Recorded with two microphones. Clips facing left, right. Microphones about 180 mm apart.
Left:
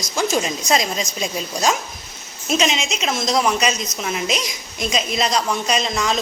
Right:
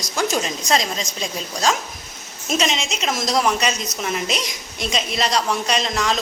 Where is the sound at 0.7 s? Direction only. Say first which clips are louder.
Left 1 dB; 10° left (ahead or behind).